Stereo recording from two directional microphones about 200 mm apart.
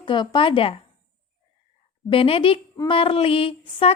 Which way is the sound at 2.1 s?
25° left (ahead or behind).